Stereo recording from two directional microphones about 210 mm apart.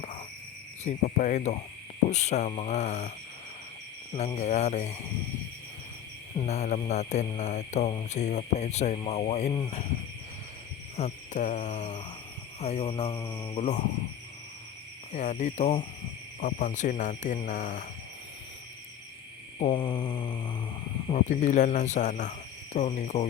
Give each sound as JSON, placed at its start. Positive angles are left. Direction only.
{"t": 0.9, "sound": "speech", "side_deg": 35}
{"t": 4.4, "sound": "speech", "side_deg": 35}
{"t": 6.4, "sound": "speech", "side_deg": 30}
{"t": 10.9, "sound": "speech", "side_deg": 35}
{"t": 12.5, "sound": "mantra", "side_deg": 30}
{"t": 13.6, "sound": "speech", "side_deg": 35}
{"t": 15.1, "sound": "speech", "side_deg": 35}
{"t": 19.5, "sound": "mantra", "side_deg": 25}
{"t": 21.1, "sound": "speech", "side_deg": 35}